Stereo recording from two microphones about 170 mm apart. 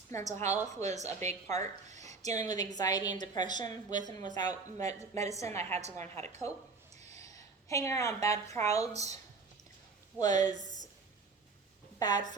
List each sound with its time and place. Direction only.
0.1 s a woman's voice: 15° left (ahead or behind)
0.8 s speech: 40° right (ahead or behind)
2.0 s a woman's voice: 20° left (ahead or behind)
5.7 s speech: 40° right (ahead or behind)
6.9 s a sound: 40° right (ahead or behind)
7.2 s a woman's voice: 20° left (ahead or behind)
10.2 s a woman's voice: 20° left (ahead or behind)
11.9 s a woman's voice: 25° left (ahead or behind)